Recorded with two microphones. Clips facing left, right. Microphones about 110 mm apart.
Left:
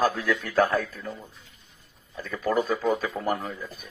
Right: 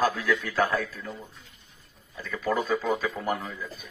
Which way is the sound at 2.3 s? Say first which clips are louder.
Left 1 dB; 45° left (ahead or behind).